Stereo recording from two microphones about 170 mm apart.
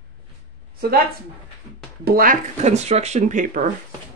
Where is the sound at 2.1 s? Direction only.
60° right (ahead or behind).